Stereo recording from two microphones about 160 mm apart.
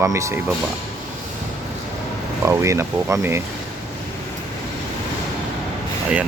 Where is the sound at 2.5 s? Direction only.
15° right (ahead or behind).